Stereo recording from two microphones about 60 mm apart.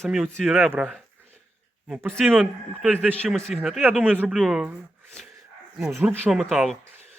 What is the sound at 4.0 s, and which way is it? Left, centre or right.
Speech, right.